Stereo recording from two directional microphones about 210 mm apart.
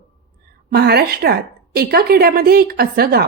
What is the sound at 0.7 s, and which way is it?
A woman's voice, 50° right (ahead or behind).